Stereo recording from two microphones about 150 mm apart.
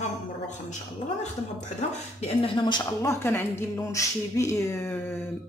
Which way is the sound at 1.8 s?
40° left (ahead or behind).